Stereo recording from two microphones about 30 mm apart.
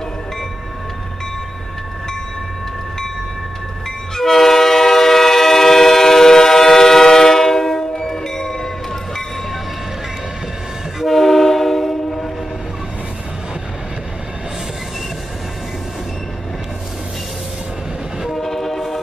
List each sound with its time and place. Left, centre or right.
4.2 s train: centre
11.1 s train: centre
18.3 s train: centre